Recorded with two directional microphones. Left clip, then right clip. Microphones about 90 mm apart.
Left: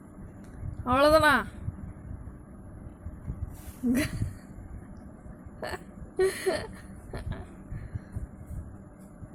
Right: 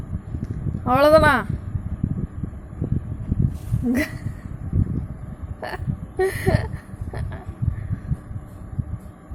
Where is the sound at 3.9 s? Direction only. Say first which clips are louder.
Right 5 dB; centre (ahead or behind).